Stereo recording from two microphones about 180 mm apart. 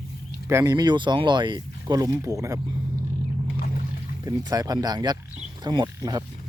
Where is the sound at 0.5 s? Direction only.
20° right (ahead or behind).